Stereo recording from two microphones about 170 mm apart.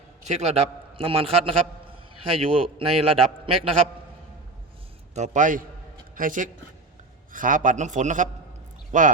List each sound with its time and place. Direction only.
0.3 s a man's voice: 40° right (ahead or behind)
5.1 s a man's voice: 45° right (ahead or behind)